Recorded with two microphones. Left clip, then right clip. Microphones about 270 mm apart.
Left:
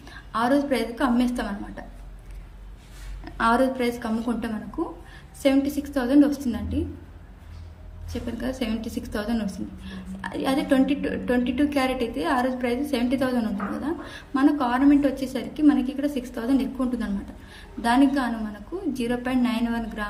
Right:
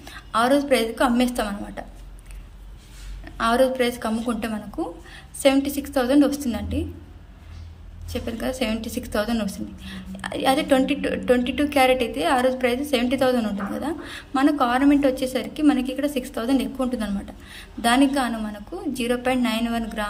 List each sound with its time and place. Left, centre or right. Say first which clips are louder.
0.0 s a woman's voice: right 4 dB; centre
3.2 s a woman's voice: right 2 dB; centre
8.1 s a woman's voice: right 3 dB; centre